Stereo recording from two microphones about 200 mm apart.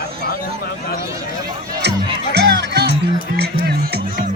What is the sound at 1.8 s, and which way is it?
Music, 55° right (ahead or behind).